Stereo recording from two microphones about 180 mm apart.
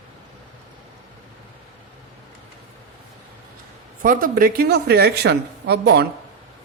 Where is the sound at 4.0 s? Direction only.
50° right (ahead or behind).